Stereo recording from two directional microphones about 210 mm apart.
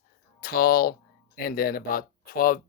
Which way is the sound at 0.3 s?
45° left (ahead or behind).